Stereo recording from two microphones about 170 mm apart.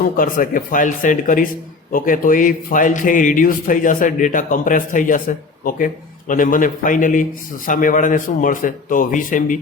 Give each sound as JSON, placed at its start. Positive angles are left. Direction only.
{"t": 0.0, "sound": "a man's voice", "side_deg": 55}